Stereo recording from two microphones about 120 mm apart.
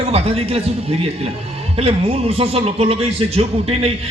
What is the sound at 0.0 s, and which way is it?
A man's voice, 55° right (ahead or behind).